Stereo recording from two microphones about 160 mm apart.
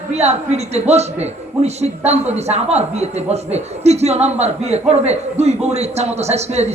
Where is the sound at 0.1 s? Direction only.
45° right (ahead or behind).